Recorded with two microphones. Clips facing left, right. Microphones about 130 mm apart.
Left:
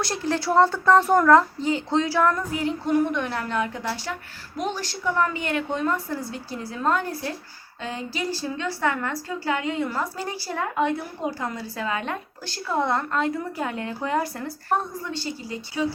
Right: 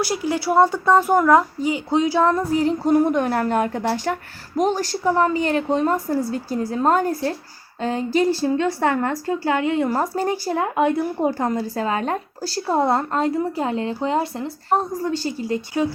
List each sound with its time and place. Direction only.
0.0 s speech: 10° right (ahead or behind)
2.4 s a woman's voice: 35° right (ahead or behind)
15.0 s a woman's voice: 40° right (ahead or behind)